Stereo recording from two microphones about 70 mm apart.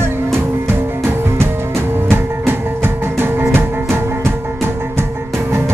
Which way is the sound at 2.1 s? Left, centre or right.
Right.